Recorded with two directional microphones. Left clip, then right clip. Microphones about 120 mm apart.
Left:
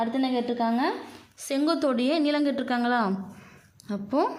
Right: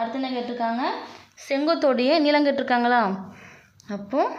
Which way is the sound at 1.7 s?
20° left (ahead or behind).